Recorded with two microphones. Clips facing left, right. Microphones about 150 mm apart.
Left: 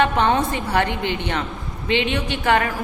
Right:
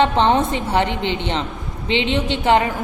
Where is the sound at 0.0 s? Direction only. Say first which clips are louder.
Right 2 dB; 25° right (ahead or behind).